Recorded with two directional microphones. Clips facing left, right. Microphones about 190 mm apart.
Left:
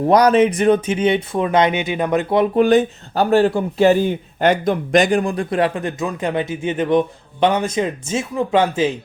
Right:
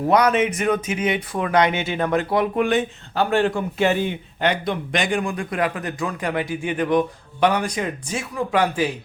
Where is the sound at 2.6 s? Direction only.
40° left (ahead or behind).